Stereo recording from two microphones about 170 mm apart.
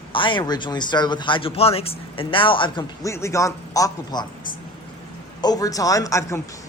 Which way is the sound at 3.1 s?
15° left (ahead or behind).